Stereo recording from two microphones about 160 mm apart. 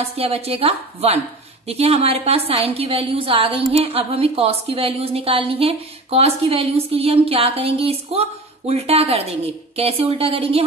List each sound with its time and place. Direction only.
0.0 s a woman's voice: 40° right (ahead or behind)